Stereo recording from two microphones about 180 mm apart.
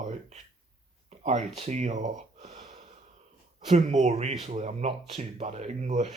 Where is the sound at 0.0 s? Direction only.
40° right (ahead or behind).